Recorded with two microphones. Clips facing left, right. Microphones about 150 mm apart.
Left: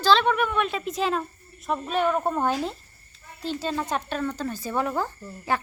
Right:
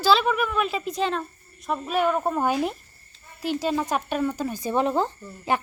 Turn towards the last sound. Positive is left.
turn(degrees=-20)  # may be behind; listen again after turning